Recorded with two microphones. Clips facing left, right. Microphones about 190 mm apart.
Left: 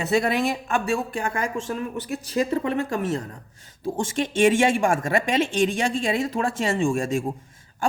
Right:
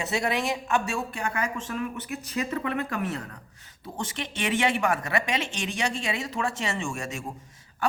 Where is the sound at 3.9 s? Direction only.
45° left (ahead or behind).